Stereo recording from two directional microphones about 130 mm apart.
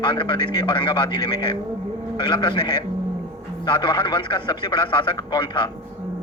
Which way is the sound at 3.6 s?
40° left (ahead or behind).